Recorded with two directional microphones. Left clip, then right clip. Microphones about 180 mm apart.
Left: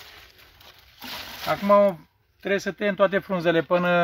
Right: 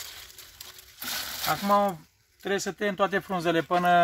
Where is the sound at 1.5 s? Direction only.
40° left (ahead or behind).